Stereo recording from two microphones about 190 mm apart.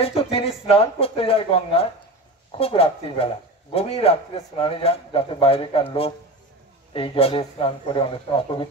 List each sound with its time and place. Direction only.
0.0 s a man's voice: 30° left (ahead or behind)
6.9 s a man's voice: 30° left (ahead or behind)